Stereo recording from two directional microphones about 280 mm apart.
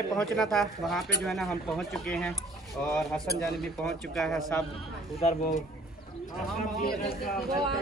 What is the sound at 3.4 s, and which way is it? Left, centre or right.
Speech, centre.